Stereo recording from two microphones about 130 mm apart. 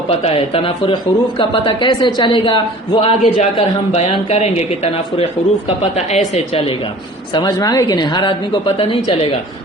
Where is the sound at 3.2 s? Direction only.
55° left (ahead or behind).